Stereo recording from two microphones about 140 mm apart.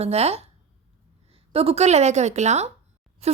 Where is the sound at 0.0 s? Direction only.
50° right (ahead or behind).